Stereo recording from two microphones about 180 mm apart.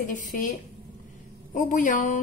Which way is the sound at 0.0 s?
45° left (ahead or behind).